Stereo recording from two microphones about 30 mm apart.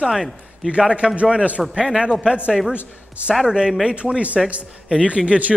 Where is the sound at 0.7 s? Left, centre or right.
Right.